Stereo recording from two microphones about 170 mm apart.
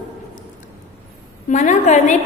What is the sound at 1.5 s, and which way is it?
Speech, 45° left (ahead or behind).